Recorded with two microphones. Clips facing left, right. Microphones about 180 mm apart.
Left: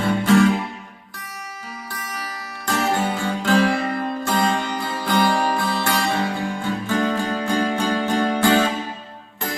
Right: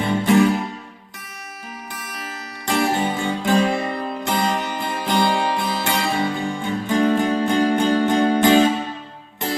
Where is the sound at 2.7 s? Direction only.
15° right (ahead or behind).